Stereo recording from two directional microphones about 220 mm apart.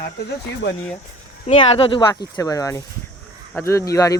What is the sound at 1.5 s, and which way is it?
Speech, 25° left (ahead or behind).